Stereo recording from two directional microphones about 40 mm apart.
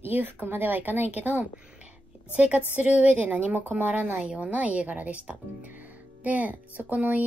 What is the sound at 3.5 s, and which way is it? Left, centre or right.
Speech, right.